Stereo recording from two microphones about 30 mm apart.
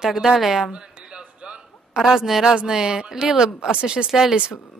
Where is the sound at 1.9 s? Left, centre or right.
Centre.